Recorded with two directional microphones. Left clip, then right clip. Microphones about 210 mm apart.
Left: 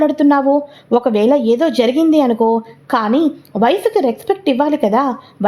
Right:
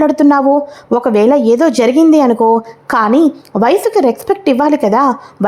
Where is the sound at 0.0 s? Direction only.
15° right (ahead or behind).